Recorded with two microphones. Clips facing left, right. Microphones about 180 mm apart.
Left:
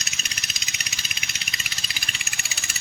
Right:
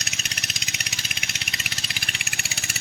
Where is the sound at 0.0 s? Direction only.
70° right (ahead or behind).